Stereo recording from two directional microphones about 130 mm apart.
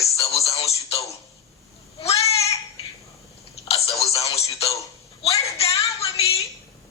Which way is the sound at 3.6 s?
50° left (ahead or behind).